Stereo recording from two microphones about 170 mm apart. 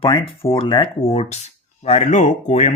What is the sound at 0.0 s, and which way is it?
Speech, 30° left (ahead or behind).